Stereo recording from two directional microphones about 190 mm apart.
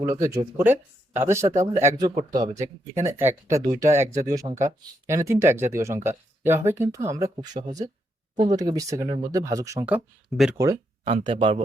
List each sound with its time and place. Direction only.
0.0 s speech: 15° right (ahead or behind)
10.6 s a sound: 15° right (ahead or behind)
11.1 s speech: 25° right (ahead or behind)